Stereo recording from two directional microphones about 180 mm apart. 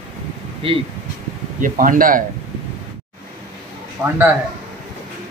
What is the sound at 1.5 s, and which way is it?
Speech, 50° right (ahead or behind).